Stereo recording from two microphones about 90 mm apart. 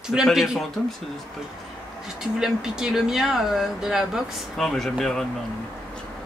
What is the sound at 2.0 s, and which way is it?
Speech, 5° right (ahead or behind).